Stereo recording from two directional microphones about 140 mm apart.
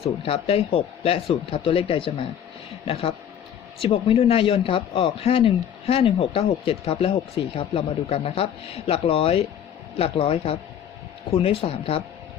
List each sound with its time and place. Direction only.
0.0 s speech: 45° left (ahead or behind)